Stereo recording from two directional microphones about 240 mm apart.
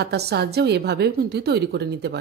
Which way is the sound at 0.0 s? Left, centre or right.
Right.